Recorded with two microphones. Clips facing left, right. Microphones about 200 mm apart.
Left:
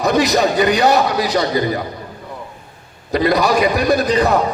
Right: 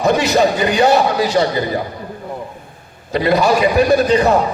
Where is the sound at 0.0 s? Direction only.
35° left (ahead or behind).